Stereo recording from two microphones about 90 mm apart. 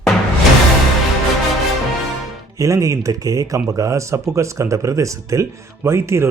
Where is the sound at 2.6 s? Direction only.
35° right (ahead or behind).